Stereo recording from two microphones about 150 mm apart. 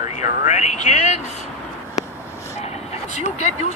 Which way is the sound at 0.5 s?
50° left (ahead or behind).